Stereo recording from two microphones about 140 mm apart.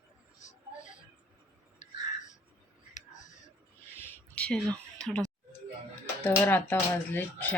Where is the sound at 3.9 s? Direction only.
10° left (ahead or behind).